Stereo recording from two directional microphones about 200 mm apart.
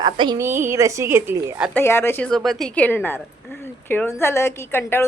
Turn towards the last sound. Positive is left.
turn(degrees=10)  # may be behind; listen again after turning